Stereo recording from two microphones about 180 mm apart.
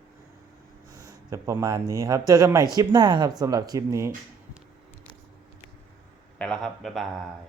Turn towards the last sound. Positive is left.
turn(degrees=0)  # may be behind; listen again after turning